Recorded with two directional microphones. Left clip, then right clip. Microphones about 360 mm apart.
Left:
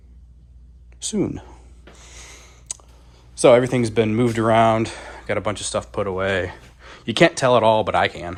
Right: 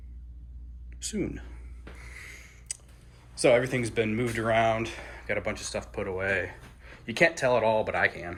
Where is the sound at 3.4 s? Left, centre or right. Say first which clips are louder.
Left 9 dB; centre.